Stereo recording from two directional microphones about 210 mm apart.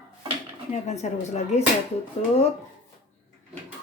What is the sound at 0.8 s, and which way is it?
Speech, 30° left (ahead or behind).